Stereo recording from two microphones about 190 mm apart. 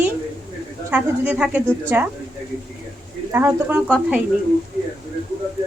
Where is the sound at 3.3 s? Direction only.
10° right (ahead or behind).